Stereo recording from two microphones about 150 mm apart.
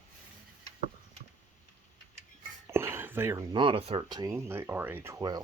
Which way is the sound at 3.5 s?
35° right (ahead or behind).